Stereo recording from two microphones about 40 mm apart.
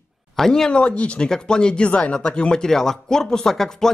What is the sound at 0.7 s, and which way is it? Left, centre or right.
Speech, left.